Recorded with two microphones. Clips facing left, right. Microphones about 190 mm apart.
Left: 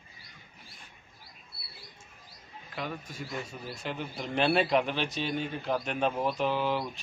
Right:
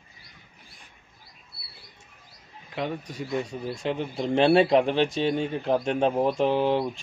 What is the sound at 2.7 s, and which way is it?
A man's voice, 25° right (ahead or behind).